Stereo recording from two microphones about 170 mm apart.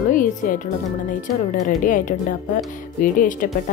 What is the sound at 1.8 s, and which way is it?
Speech, 50° left (ahead or behind).